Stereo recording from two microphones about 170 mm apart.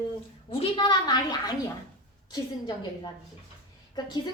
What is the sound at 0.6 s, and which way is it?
A woman's voice, 25° left (ahead or behind).